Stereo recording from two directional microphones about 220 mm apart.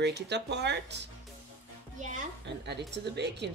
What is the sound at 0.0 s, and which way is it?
Speech, 50° right (ahead or behind).